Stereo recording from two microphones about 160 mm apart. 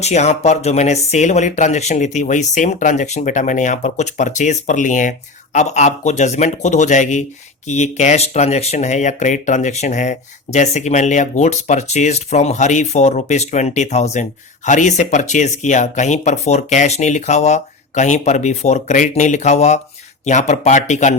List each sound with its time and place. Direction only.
0.0 s speech: 45° left (ahead or behind)